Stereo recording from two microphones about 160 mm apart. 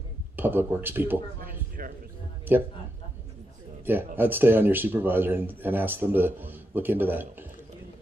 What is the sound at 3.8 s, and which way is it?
Speech, 10° right (ahead or behind).